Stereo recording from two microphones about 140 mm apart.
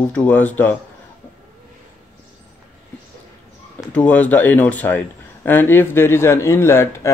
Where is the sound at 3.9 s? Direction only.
10° left (ahead or behind).